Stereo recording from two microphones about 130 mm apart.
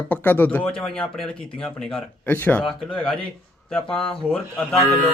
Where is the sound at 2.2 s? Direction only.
15° left (ahead or behind).